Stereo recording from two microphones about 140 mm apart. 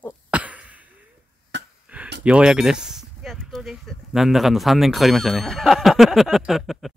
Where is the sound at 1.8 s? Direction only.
10° right (ahead or behind).